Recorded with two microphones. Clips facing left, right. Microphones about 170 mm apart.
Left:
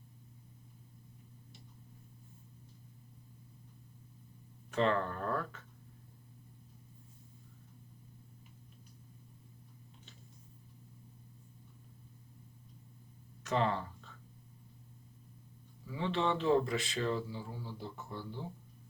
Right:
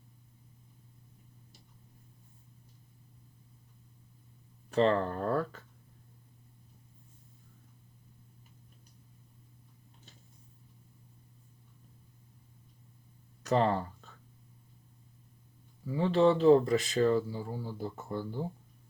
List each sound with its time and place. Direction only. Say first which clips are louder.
4.7 s speech: right 5 dB; 35° right (ahead or behind)
13.4 s a sound: right 5 dB; 40° right (ahead or behind)
16.0 s speech: right 8 dB; 40° right (ahead or behind)